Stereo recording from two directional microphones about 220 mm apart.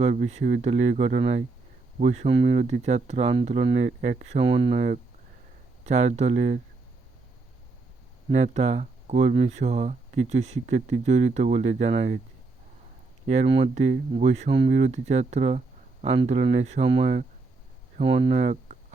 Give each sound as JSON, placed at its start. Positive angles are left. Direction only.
{"t": 0.0, "sound": "speech", "side_deg": -30}
{"t": 5.8, "sound": "speech", "side_deg": -30}
{"t": 8.3, "sound": "speech", "side_deg": -30}
{"t": 13.2, "sound": "speech", "side_deg": -30}